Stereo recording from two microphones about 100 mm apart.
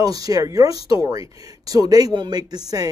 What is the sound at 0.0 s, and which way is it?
Speech, 40° right (ahead or behind).